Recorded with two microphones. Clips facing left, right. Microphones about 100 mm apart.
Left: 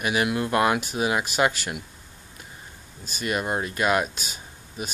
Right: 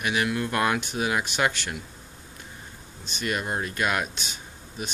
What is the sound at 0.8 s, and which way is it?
Speech, 5° left (ahead or behind).